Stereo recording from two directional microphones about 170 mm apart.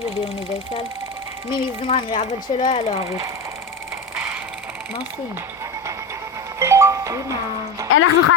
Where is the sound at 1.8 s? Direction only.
35° left (ahead or behind).